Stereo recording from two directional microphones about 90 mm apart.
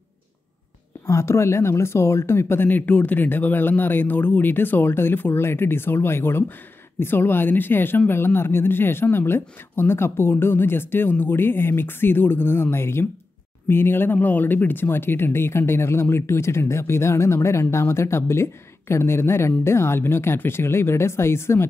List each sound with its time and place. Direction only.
1.0 s speech: 30° left (ahead or behind)